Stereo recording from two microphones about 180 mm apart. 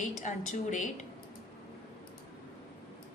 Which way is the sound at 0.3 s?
45° left (ahead or behind).